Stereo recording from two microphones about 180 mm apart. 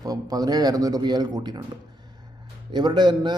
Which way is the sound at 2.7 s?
25° right (ahead or behind).